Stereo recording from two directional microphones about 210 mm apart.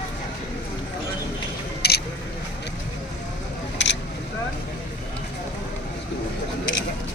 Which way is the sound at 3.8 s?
60° left (ahead or behind).